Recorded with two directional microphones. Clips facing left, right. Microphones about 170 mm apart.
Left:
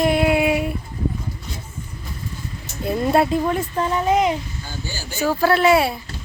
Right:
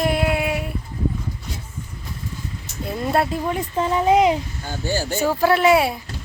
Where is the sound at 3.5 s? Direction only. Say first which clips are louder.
Left 1 dB; 15° right (ahead or behind).